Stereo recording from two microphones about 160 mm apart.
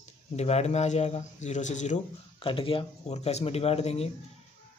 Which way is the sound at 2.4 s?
35° left (ahead or behind).